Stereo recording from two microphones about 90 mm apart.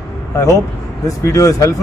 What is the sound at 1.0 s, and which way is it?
Speech, 40° left (ahead or behind).